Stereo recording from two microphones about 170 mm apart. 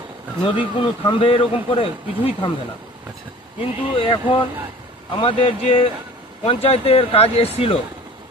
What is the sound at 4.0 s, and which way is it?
Speech, 30° left (ahead or behind).